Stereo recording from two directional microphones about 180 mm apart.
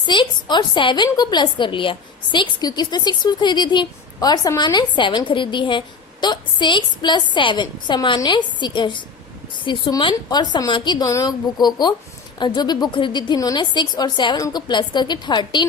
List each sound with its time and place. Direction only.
0.0 s a woman's voice: 25° left (ahead or behind)